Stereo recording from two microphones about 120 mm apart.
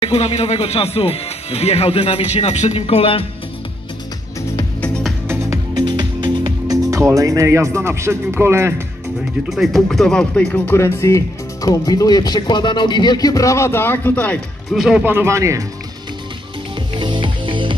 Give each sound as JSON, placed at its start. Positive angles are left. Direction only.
{"t": 0.0, "sound": "speech", "side_deg": 65}
{"t": 4.8, "sound": "music", "side_deg": 10}
{"t": 5.8, "sound": "music", "side_deg": -40}
{"t": 9.5, "sound": "speech", "side_deg": 0}
{"t": 14.7, "sound": "speech", "side_deg": -5}
{"t": 15.0, "sound": "speech", "side_deg": -20}
{"t": 16.9, "sound": "music", "side_deg": -40}